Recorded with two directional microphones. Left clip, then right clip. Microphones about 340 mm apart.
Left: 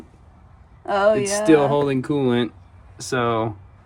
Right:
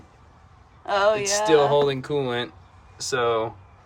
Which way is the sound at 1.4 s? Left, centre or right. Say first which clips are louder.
Left 1 dB; centre.